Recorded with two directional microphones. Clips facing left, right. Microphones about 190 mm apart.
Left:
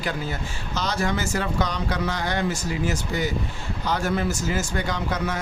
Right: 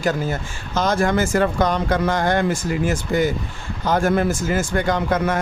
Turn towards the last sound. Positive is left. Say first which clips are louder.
# right 7 dB
turn(degrees=-50)  # may be behind; listen again after turning